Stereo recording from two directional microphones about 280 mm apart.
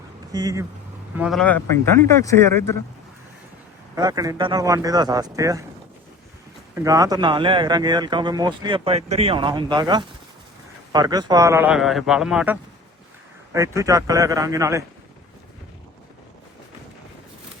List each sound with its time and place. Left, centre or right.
0.3 s speech: centre
1.1 s speech: centre
3.9 s speech: centre
6.8 s a man's voice: centre